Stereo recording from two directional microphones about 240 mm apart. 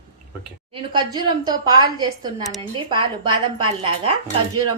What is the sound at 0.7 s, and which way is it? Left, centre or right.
A woman's voice, centre.